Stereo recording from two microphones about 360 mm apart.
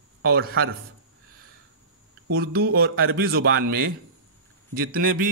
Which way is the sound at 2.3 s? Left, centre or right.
Right.